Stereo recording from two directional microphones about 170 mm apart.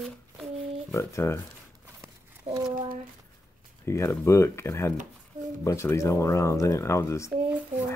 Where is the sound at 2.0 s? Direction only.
15° right (ahead or behind).